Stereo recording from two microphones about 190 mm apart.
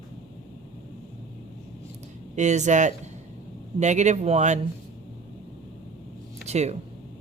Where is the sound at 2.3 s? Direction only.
40° right (ahead or behind).